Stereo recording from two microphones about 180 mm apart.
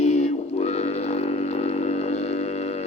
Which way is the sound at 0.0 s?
40° left (ahead or behind).